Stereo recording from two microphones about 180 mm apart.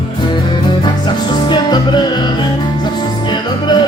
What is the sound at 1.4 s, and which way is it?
Music, 25° left (ahead or behind).